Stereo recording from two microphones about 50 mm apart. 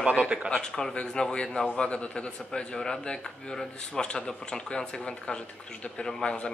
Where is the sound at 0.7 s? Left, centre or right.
Centre.